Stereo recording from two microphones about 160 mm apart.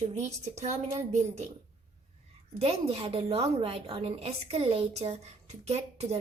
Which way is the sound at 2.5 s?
40° right (ahead or behind).